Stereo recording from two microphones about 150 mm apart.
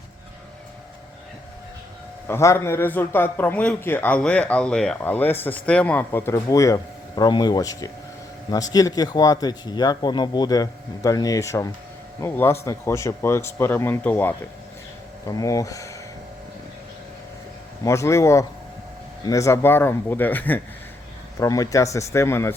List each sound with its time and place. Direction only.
2.2 s speech: 15° left (ahead or behind)
15.3 s speech: 25° left (ahead or behind)
17.8 s speech: 20° left (ahead or behind)
21.3 s speech: 20° left (ahead or behind)